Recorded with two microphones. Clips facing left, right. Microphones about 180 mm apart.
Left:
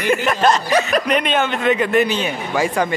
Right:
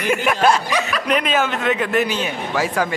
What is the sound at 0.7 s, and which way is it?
Speech, 45° left (ahead or behind).